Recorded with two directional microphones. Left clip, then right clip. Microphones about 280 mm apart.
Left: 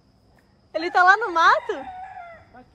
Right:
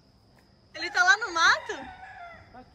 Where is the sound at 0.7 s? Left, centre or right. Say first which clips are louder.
Left 6 dB; centre.